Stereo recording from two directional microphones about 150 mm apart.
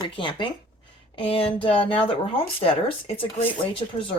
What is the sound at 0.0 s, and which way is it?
Speech, 30° left (ahead or behind).